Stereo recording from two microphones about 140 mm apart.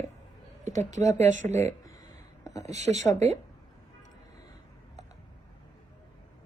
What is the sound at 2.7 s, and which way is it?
Speech, 55° right (ahead or behind).